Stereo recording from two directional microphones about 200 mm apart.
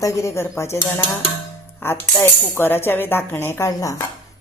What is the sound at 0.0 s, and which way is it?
Speech, 15° left (ahead or behind).